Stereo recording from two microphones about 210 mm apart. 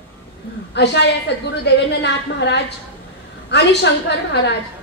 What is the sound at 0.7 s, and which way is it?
A woman's voice, 55° left (ahead or behind).